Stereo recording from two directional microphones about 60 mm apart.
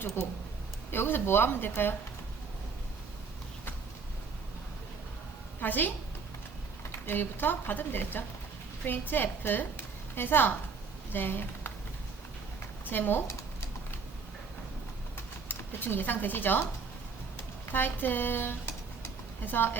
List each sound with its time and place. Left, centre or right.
0.2 s a woman's voice: left
5.5 s a woman's voice: left
7.0 s a woman's voice: left
12.8 s speech: left
15.4 s speech: left
17.7 s a woman's voice: left